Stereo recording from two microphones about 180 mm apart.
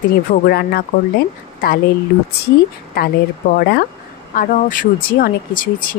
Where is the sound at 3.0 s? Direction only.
55° left (ahead or behind).